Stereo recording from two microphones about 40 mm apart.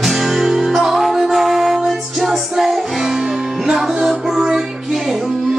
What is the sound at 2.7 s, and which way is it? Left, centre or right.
Music, centre.